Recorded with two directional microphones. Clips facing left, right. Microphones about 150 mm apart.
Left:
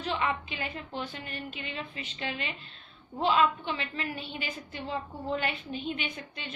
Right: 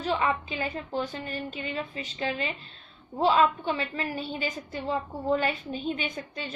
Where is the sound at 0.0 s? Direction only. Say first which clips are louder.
Right 4 dB; 40° right (ahead or behind).